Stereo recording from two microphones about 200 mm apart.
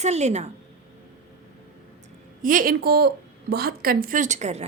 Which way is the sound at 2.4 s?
45° right (ahead or behind).